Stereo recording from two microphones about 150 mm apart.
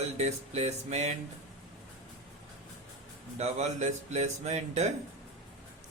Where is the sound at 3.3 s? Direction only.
50° right (ahead or behind).